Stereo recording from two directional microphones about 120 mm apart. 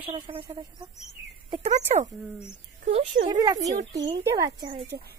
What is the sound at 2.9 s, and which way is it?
Speech, 60° right (ahead or behind).